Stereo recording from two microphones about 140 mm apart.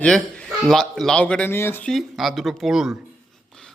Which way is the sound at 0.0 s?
5° left (ahead or behind).